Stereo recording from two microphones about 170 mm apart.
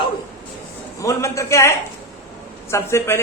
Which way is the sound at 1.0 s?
20° left (ahead or behind).